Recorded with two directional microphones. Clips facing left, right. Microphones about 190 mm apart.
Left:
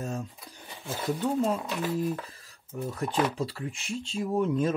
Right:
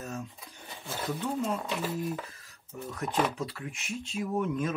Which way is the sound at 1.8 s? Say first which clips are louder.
Left 4 dB; 10° right (ahead or behind).